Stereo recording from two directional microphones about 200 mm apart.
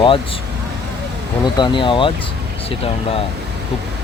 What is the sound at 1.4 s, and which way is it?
Speech, 25° left (ahead or behind).